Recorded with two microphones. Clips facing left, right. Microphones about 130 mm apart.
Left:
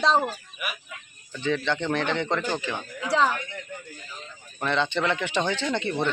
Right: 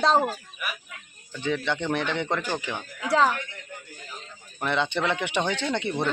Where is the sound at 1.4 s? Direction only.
15° right (ahead or behind).